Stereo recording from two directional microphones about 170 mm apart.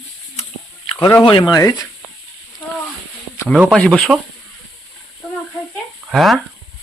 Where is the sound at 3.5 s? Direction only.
10° right (ahead or behind).